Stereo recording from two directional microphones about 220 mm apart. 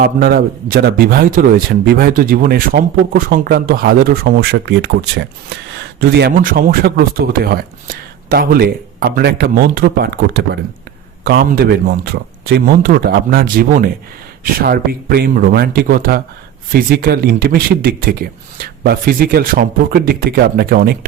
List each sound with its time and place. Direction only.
0.0 s a man's voice: 40° right (ahead or behind)